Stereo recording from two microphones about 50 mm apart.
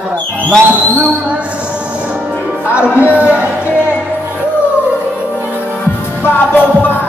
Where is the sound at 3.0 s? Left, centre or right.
Right.